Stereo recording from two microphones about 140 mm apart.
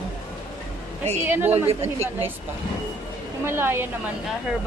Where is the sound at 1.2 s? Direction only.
15° right (ahead or behind).